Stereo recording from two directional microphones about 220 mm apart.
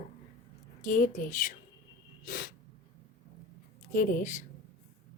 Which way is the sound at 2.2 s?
40° left (ahead or behind).